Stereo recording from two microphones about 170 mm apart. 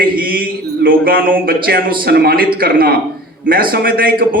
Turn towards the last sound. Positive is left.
turn(degrees=-60)  # may be behind; listen again after turning